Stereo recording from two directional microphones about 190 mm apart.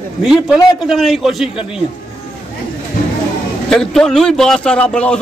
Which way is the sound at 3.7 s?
5° left (ahead or behind).